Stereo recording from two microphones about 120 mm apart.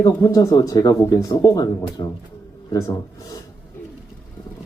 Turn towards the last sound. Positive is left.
turn(degrees=30)  # may be behind; listen again after turning